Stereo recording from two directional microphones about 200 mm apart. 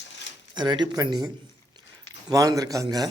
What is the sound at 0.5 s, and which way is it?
Speech, 20° right (ahead or behind).